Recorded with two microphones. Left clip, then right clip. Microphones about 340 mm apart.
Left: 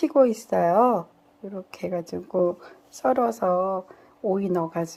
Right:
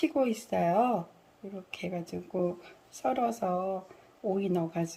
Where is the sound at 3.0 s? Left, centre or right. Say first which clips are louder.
Left 7 dB; left.